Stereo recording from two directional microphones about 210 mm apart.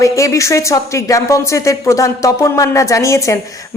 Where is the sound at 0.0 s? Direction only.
15° left (ahead or behind).